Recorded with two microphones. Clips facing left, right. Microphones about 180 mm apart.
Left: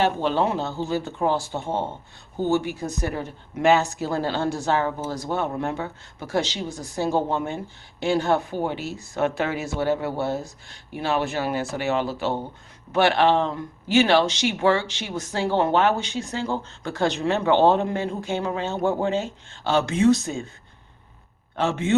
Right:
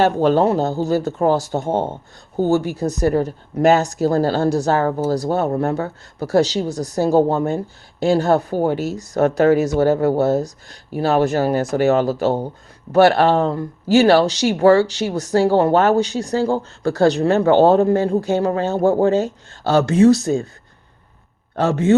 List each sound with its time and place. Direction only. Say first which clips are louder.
0.0 s speech: right 7 dB; 40° right (ahead or behind)
21.5 s a man's voice: right 8 dB; 40° right (ahead or behind)